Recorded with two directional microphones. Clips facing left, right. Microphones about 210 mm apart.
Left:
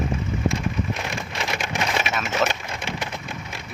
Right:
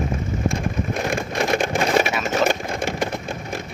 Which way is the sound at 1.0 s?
50° right (ahead or behind).